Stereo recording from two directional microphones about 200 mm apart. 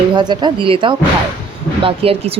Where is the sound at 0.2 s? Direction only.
20° right (ahead or behind).